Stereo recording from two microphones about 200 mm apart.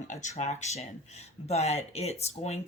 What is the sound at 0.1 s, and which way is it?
Speech, 35° left (ahead or behind).